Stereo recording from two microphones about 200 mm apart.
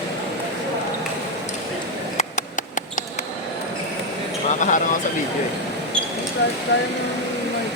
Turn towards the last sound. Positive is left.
turn(degrees=55)  # may be behind; listen again after turning